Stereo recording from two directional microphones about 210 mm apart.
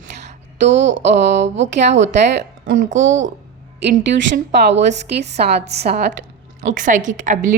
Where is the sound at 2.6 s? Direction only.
40° right (ahead or behind).